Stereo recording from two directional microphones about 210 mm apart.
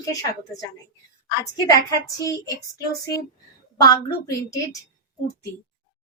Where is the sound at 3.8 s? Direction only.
15° left (ahead or behind).